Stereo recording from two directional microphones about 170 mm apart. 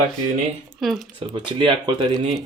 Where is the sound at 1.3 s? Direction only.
25° right (ahead or behind).